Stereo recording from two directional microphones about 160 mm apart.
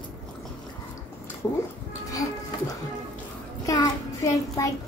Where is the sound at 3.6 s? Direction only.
20° left (ahead or behind).